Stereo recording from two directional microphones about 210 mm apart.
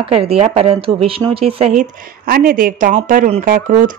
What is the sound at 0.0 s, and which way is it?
A woman's voice, 25° right (ahead or behind).